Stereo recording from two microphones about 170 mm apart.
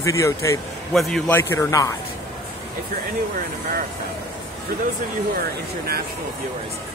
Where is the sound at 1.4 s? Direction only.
15° left (ahead or behind).